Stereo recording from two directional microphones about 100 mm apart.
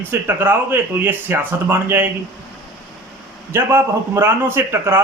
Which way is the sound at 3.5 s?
25° right (ahead or behind).